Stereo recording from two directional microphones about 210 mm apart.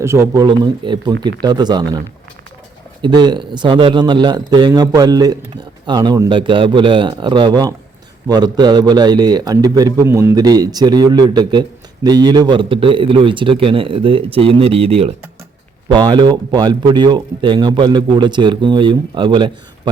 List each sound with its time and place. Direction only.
0.0 s speech: 15° right (ahead or behind)
3.0 s speech: 20° right (ahead or behind)